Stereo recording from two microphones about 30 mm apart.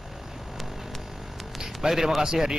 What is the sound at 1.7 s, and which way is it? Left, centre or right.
Speech, centre.